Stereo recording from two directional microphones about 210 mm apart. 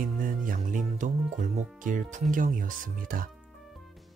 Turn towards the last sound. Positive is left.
turn(degrees=-40)  # may be behind; listen again after turning